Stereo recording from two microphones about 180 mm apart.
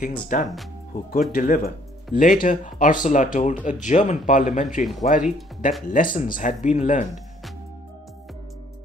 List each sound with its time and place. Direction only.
0.0 s speech: 50° left (ahead or behind)